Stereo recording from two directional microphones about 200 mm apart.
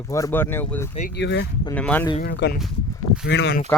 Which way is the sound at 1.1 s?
60° left (ahead or behind).